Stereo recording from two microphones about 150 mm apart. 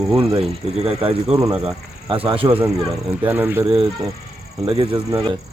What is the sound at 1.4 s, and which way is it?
Speech, 10° right (ahead or behind).